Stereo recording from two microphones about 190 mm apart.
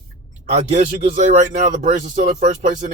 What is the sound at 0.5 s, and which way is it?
Speech, 35° right (ahead or behind).